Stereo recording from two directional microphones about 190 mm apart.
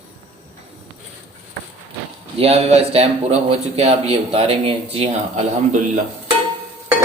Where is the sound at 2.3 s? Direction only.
30° right (ahead or behind).